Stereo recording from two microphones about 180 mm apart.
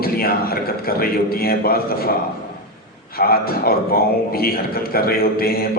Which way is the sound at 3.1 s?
55° left (ahead or behind).